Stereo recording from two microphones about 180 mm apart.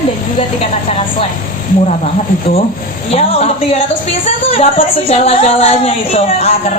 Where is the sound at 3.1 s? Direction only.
35° left (ahead or behind).